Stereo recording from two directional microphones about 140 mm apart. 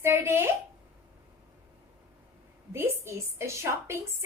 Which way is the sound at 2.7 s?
15° right (ahead or behind).